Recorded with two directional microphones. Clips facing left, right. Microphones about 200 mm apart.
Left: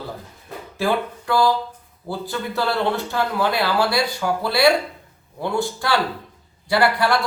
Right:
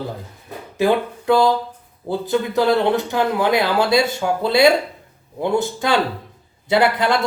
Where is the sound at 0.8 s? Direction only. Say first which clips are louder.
Right 4 dB; 20° right (ahead or behind).